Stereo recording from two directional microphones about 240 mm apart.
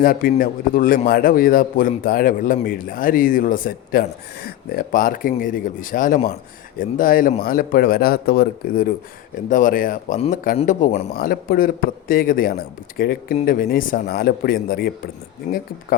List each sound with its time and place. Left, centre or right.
0.0 s a man's voice: left
11.1 s a man's voice: left
15.4 s speech: left